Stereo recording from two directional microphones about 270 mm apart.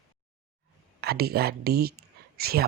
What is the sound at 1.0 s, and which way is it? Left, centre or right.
Speech, right.